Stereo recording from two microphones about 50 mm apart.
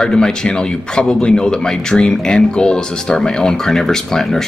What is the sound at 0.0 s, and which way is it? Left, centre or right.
Speech, centre.